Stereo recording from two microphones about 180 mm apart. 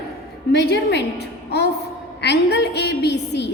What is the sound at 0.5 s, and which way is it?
A woman's voice, 65° left (ahead or behind).